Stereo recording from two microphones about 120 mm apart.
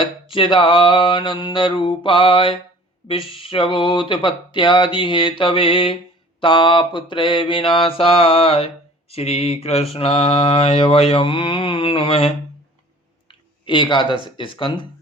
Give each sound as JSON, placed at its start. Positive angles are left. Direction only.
{"t": 0.0, "sound": "mantra", "side_deg": 45}
{"t": 13.2, "sound": "speech", "side_deg": 40}